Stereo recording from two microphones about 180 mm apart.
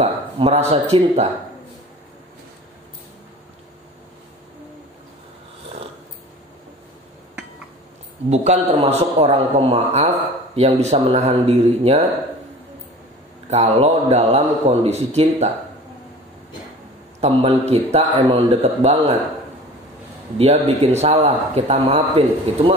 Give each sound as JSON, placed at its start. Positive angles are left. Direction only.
{"t": 0.0, "sound": "speech", "side_deg": -35}
{"t": 8.3, "sound": "a man's voice", "side_deg": -35}
{"t": 13.5, "sound": "a man's voice", "side_deg": -35}
{"t": 17.2, "sound": "a man's voice", "side_deg": -35}
{"t": 20.3, "sound": "a man's voice", "side_deg": -35}